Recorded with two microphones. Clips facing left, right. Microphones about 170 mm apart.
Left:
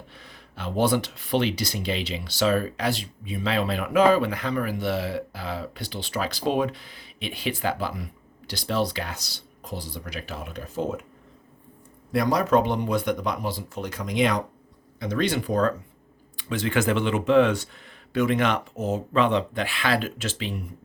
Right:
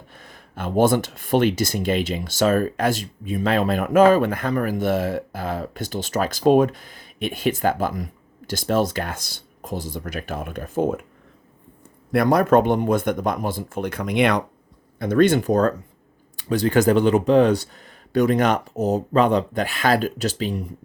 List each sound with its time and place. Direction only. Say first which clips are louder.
0.1 s speech: right 4 dB; 45° right (ahead or behind)
12.1 s speech: right 5 dB; 55° right (ahead or behind)
14.9 s speech: right 8 dB; 50° right (ahead or behind)